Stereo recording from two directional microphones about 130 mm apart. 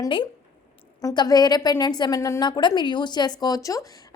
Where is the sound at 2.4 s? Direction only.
35° left (ahead or behind).